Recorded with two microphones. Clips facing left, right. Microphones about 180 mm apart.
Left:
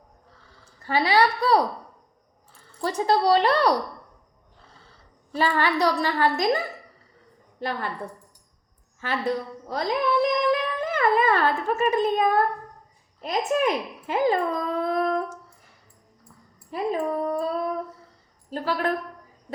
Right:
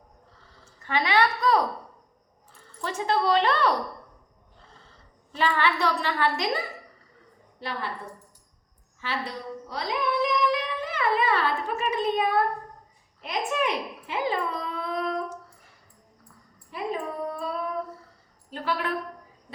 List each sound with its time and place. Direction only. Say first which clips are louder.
0.8 s a sound: left 3 dB; 35° left (ahead or behind)
2.8 s a sound: left 4 dB; 35° left (ahead or behind)
5.3 s a woman's voice: left 2 dB; 40° left (ahead or behind)
7.6 s a woman's voice: left 4 dB; 50° left (ahead or behind)
9.0 s a woman's voice: left 6 dB; 50° left (ahead or behind)
10.3 s a sound: left 3 dB; 50° left (ahead or behind)
13.2 s speech: left 4 dB; 40° left (ahead or behind)
16.7 s child singing: left 5 dB; 40° left (ahead or behind)
18.5 s a woman's voice: left 4 dB; 40° left (ahead or behind)